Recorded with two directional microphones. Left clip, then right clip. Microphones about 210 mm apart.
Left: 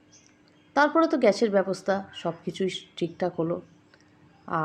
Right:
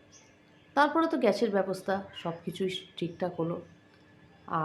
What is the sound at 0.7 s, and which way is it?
Speech, 15° left (ahead or behind).